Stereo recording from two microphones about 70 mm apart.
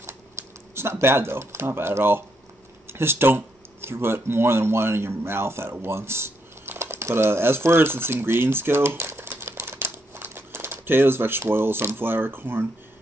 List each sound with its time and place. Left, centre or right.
0.7 s speech: right